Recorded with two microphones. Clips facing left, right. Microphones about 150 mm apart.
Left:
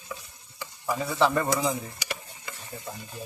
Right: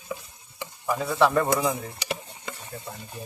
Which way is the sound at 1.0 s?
Centre (ahead or behind).